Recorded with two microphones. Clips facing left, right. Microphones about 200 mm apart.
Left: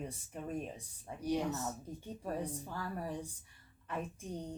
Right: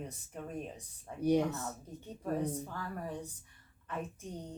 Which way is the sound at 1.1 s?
15° left (ahead or behind).